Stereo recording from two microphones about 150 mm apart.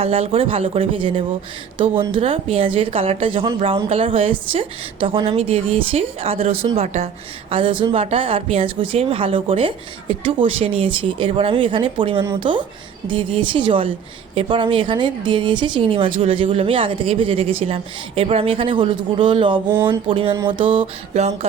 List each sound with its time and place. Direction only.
0.0 s speech: 40° right (ahead or behind)
7.5 s speech: 35° right (ahead or behind)